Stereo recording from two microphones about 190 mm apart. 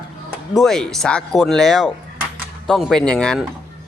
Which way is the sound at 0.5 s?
Centre (ahead or behind).